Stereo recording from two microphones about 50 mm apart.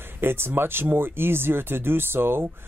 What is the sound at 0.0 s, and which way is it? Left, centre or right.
Speech, right.